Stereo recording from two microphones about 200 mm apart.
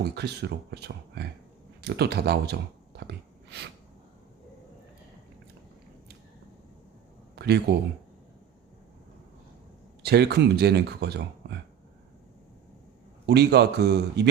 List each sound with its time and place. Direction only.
0.0 s speech: 55° right (ahead or behind)
7.3 s a sound: 55° right (ahead or behind)
10.0 s speech: 55° right (ahead or behind)
13.2 s speech: 55° right (ahead or behind)